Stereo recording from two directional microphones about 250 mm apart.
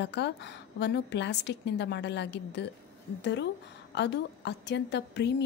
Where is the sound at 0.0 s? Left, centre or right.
Left.